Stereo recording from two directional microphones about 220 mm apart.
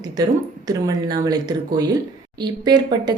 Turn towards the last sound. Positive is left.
turn(degrees=-20)  # may be behind; listen again after turning